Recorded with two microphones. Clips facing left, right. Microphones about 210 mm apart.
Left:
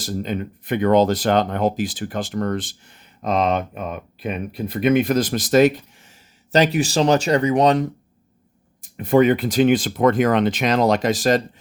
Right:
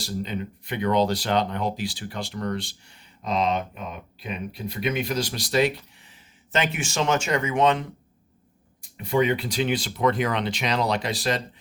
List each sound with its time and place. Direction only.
0.0 s speech: 45° left (ahead or behind)
8.8 s speech: 50° left (ahead or behind)